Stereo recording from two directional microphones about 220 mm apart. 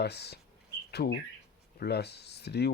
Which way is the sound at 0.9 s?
45° left (ahead or behind).